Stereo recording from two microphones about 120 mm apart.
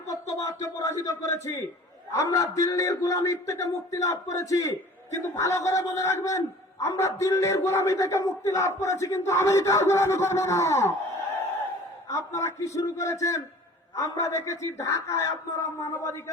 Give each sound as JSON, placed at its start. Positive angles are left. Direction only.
{"t": 0.1, "sound": "a man's voice", "side_deg": 25}
{"t": 12.0, "sound": "a man's voice", "side_deg": 25}